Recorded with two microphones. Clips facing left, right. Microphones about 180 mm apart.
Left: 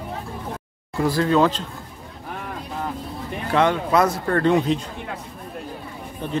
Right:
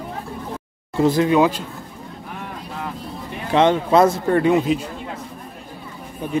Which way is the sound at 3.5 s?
20° right (ahead or behind).